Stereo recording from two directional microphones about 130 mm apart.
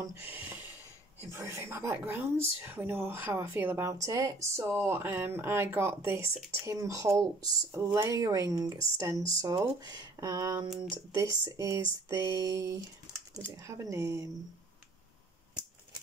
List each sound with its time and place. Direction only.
0.1 s a woman's voice: 15° right (ahead or behind)